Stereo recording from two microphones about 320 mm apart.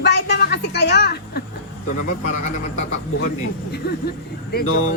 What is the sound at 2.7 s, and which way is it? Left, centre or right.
Speech, left.